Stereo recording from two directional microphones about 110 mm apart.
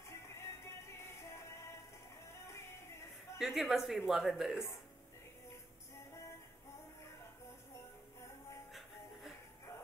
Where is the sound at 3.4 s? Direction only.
Centre (ahead or behind).